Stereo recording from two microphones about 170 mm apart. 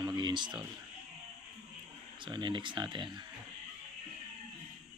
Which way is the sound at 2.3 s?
30° right (ahead or behind).